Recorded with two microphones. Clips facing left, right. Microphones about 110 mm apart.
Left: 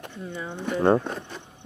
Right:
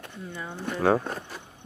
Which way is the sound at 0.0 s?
20° left (ahead or behind).